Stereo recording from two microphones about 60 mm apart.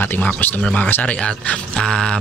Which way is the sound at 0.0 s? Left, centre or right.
Left.